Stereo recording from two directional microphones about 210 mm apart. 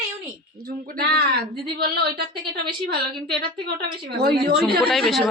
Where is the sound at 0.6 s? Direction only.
45° right (ahead or behind).